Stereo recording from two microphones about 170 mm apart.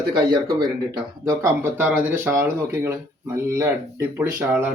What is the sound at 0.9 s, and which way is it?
Speech, 20° right (ahead or behind).